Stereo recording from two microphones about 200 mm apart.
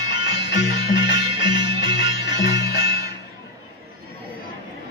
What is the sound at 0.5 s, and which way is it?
Music, 60° left (ahead or behind).